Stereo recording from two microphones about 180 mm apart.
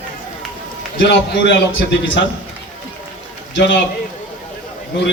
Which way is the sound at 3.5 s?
90° left.